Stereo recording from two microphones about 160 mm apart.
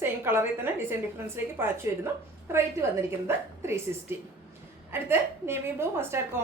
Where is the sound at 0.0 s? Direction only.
15° right (ahead or behind).